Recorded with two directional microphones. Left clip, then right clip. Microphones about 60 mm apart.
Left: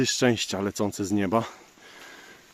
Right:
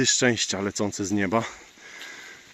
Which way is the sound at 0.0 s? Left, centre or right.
Centre.